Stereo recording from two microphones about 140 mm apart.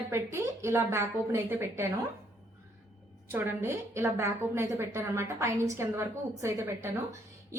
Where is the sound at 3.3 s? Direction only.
20° right (ahead or behind).